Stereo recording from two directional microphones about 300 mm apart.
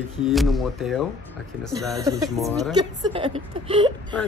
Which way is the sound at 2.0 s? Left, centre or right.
Centre.